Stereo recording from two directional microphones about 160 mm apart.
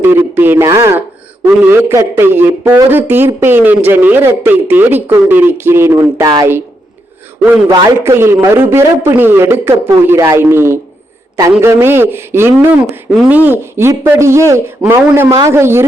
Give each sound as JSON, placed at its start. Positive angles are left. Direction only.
{"t": 0.0, "sound": "a man's voice", "side_deg": -15}
{"t": 8.0, "sound": "a man's voice", "side_deg": -15}